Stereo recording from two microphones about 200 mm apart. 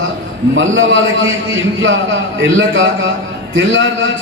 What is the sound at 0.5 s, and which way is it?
Speech, 75° right (ahead or behind).